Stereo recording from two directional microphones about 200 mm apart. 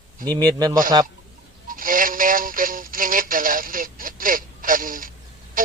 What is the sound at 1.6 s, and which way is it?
Synthetic singing, 45° right (ahead or behind).